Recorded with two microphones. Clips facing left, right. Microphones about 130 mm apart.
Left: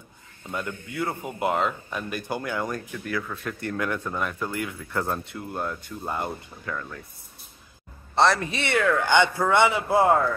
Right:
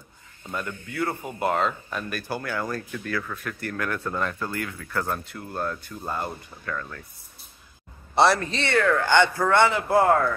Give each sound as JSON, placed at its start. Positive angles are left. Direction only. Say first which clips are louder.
{"t": 0.5, "sound": "speech", "louder": "left 1 dB", "side_deg": 15}
{"t": 8.1, "sound": "a man's voice", "louder": "right 1 dB", "side_deg": -10}
{"t": 8.4, "sound": "speech", "louder": "right 1 dB", "side_deg": 15}